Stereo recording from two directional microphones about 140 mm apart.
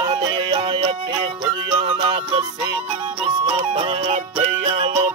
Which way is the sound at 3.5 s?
40° right (ahead or behind).